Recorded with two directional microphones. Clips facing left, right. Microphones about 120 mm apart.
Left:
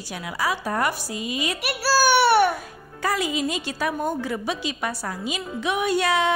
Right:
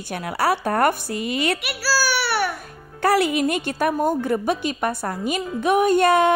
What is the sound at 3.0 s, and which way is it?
A woman's voice, 65° right (ahead or behind).